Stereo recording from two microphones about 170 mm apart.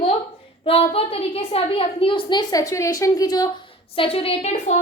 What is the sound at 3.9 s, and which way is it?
Speech, 35° left (ahead or behind).